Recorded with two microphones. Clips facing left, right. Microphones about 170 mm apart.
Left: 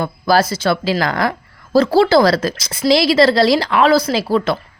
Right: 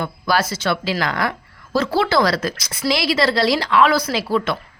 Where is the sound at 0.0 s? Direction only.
35° left (ahead or behind).